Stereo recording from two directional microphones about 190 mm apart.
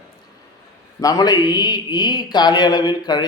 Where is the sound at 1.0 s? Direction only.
20° left (ahead or behind).